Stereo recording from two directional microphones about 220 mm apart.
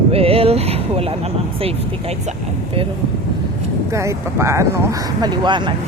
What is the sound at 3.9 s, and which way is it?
Speech, 15° right (ahead or behind).